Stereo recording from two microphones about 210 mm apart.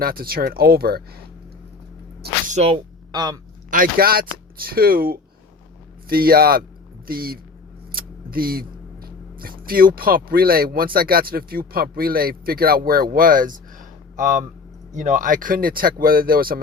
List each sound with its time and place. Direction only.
0.0 s speech: 45° right (ahead or behind)
2.2 s a sound: 35° right (ahead or behind)
3.1 s speech: 20° right (ahead or behind)
3.7 s speech: 45° right (ahead or behind)